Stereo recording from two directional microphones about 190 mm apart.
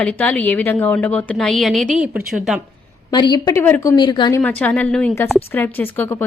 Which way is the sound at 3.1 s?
20° left (ahead or behind).